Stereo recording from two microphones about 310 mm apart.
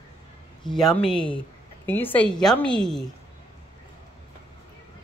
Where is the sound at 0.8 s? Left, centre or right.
Centre.